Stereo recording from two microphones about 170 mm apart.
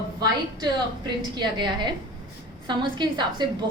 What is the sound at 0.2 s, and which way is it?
A woman's voice, 25° right (ahead or behind).